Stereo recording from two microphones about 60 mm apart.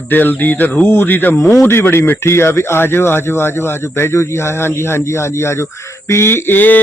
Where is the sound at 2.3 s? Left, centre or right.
Left.